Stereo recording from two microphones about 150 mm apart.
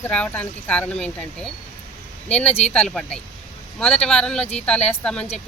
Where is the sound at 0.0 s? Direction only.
10° left (ahead or behind).